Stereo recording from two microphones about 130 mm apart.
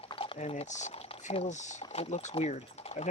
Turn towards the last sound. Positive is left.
turn(degrees=55)  # may be behind; listen again after turning